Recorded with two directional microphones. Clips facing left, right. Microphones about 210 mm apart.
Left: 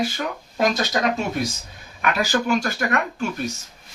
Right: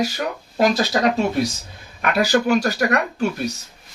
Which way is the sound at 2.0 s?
40° right (ahead or behind).